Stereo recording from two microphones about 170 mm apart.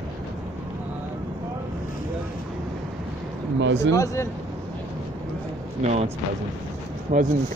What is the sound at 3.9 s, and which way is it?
Speech, 20° left (ahead or behind).